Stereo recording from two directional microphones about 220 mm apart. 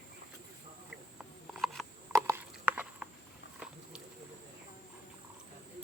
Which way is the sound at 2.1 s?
10° right (ahead or behind).